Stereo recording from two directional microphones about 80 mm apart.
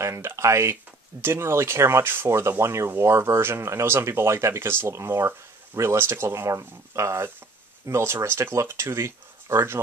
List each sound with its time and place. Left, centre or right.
0.0 s speech: right